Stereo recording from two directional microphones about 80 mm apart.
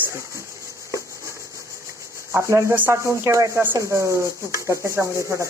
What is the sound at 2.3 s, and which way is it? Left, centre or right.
Rub, right.